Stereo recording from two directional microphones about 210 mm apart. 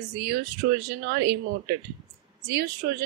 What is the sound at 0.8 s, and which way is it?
Speech, 50° right (ahead or behind).